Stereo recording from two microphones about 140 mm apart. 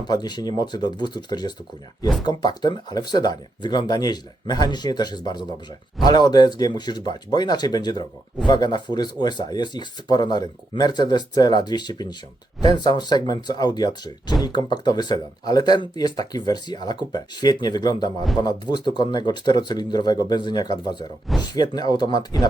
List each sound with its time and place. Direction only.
0.0 s speech: 30° left (ahead or behind)